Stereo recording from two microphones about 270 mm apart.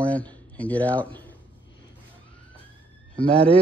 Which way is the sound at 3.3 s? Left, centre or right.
Right.